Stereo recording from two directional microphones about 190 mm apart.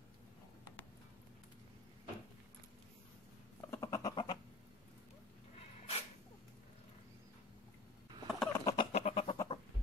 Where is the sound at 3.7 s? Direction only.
15° left (ahead or behind).